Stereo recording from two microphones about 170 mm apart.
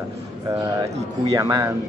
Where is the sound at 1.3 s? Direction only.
20° right (ahead or behind).